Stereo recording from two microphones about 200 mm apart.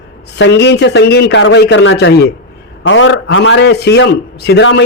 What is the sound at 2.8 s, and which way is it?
A man's voice, 70° left (ahead or behind).